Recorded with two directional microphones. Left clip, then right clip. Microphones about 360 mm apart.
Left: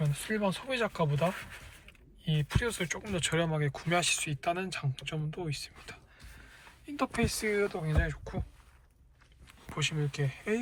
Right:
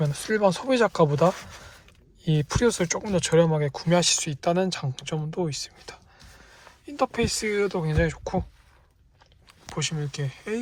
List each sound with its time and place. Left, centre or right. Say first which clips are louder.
0.0 s speech: right 10 dB; centre
2.5 s speech: right 11 dB; centre
9.5 s speech: right 3 dB; centre